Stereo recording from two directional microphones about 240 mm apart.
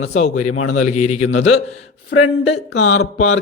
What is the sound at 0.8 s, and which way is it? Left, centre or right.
Speech, left.